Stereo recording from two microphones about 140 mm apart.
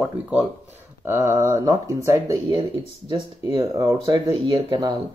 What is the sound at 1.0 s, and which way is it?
Speech, 15° right (ahead or behind).